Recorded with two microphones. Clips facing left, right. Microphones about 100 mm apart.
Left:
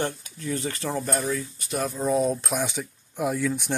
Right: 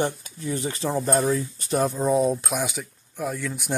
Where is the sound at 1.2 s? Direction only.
30° right (ahead or behind).